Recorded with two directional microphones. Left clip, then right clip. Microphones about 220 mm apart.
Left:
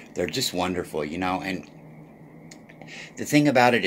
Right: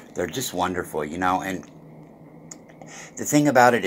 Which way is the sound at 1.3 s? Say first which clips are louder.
Right 4 dB; centre (ahead or behind).